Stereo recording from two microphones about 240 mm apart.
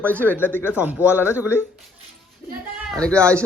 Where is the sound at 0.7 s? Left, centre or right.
Centre.